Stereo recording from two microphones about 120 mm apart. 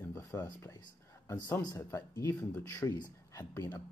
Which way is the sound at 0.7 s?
35° left (ahead or behind).